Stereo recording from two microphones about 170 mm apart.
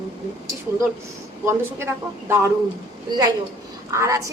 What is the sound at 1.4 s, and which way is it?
A woman's voice, 15° right (ahead or behind).